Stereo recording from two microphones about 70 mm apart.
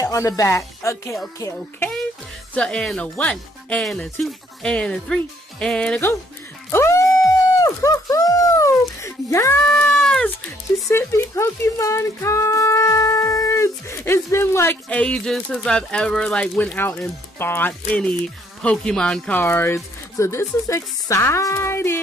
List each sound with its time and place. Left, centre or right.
0.0 s speech: left
2.5 s speech: centre
6.7 s a sound: left
9.7 s speech: centre
10.9 s speech: left
14.9 s speech: centre
16.7 s speech: left
17.9 s speech: centre
19.3 s speech: left